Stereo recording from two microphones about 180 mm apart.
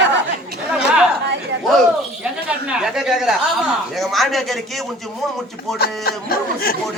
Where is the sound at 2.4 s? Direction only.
5° right (ahead or behind).